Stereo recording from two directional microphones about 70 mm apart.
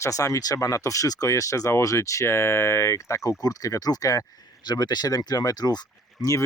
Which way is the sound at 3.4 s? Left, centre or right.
Left.